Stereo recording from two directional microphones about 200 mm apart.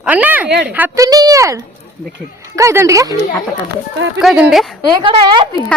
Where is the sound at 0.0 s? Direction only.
5° right (ahead or behind).